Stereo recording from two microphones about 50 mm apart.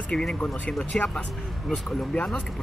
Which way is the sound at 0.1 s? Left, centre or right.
Left.